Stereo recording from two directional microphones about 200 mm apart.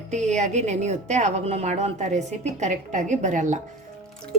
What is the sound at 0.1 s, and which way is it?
A woman's voice, 35° right (ahead or behind).